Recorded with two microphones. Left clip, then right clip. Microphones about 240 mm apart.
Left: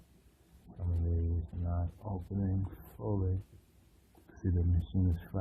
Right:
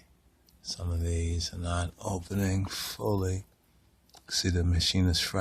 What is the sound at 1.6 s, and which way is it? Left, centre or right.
Speech, right.